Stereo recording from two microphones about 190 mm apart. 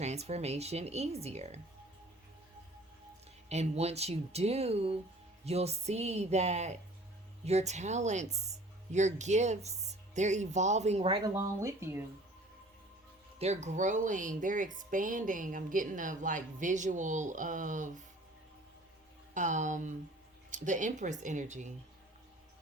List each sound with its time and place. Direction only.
0.0 s speech: 35° right (ahead or behind)
3.5 s speech: 35° right (ahead or behind)
11.3 s speech: 15° right (ahead or behind)
13.4 s speech: 35° right (ahead or behind)
19.3 s speech: 40° right (ahead or behind)